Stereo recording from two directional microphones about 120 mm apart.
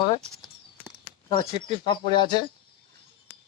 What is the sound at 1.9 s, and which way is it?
Speech, 40° left (ahead or behind).